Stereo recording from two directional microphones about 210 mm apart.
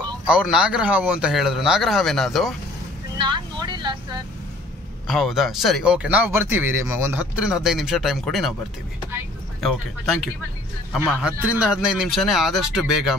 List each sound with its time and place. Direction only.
0.3 s speech: 5° right (ahead or behind)
3.2 s vehicle: 20° right (ahead or behind)
5.0 s speech: centre (ahead or behind)
10.9 s speech: 5° right (ahead or behind)